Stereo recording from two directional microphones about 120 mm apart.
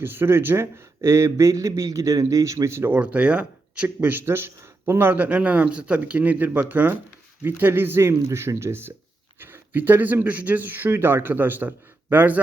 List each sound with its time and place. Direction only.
0.0 s speech: 20° right (ahead or behind)